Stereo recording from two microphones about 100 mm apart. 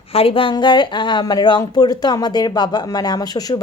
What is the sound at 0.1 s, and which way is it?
Speech, 70° left (ahead or behind).